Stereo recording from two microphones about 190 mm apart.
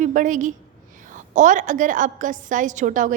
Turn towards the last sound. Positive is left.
turn(degrees=-40)  # may be behind; listen again after turning